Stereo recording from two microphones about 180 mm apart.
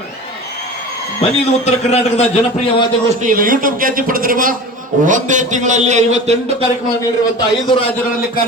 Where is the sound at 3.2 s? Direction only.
50° right (ahead or behind).